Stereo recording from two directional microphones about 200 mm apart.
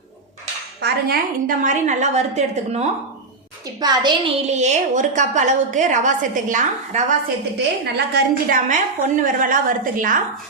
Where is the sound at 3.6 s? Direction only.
20° right (ahead or behind).